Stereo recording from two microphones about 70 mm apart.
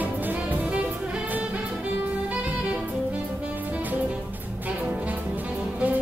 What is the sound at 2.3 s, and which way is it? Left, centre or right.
Saxophone, centre.